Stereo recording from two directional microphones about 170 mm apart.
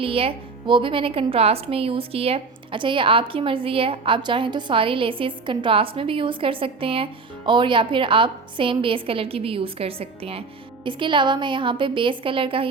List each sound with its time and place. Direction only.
0.0 s a woman's voice: 35° right (ahead or behind)